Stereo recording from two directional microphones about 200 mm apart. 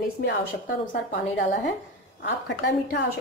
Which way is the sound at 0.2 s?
55° left (ahead or behind).